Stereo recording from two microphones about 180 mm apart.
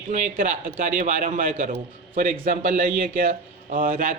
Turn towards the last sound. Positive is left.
turn(degrees=-50)  # may be behind; listen again after turning